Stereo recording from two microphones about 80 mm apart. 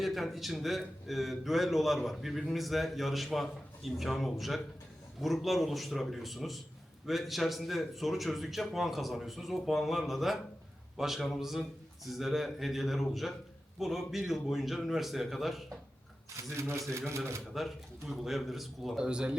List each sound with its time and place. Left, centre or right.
0.0 s a man's voice: centre
16.6 s speech: right
18.1 s a man's voice: centre